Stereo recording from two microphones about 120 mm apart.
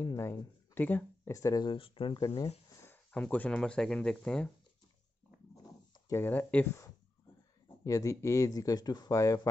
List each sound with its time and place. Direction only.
0.0 s speech: 20° left (ahead or behind)
1.3 s speech: 30° left (ahead or behind)
1.7 s speech: 45° left (ahead or behind)
2.8 s speech: 15° left (ahead or behind)
5.6 s a sound: 30° left (ahead or behind)
6.2 s speech: 15° left (ahead or behind)
7.6 s speech: 30° left (ahead or behind)